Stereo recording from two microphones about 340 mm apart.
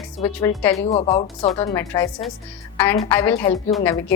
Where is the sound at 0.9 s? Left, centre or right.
Centre.